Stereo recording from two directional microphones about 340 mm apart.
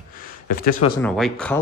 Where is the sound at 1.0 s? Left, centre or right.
Centre.